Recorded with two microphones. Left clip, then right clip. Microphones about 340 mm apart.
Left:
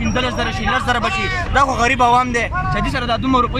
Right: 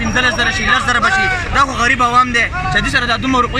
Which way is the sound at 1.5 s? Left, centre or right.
Centre.